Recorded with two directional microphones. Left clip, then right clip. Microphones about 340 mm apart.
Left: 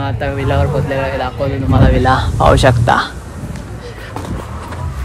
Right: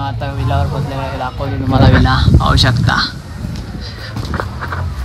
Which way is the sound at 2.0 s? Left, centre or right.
Centre.